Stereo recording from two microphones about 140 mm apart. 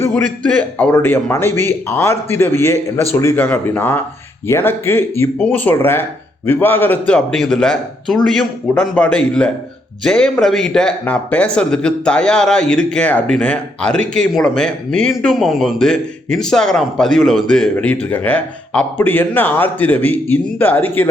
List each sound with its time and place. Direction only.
0.4 s a man's voice: 10° left (ahead or behind)